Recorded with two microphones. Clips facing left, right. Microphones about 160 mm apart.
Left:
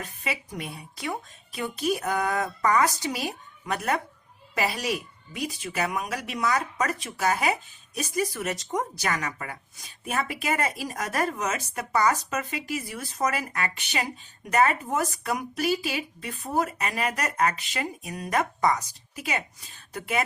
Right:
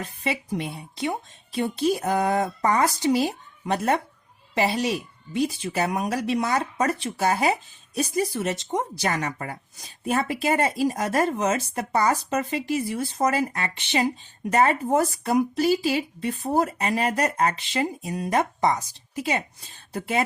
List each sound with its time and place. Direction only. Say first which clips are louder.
0.0 s a woman's voice: right 5 dB; 30° right (ahead or behind)